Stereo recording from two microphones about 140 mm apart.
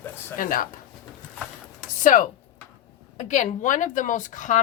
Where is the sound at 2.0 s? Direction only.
65° left (ahead or behind).